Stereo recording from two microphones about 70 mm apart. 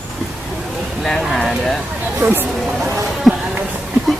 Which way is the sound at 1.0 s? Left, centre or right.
Centre.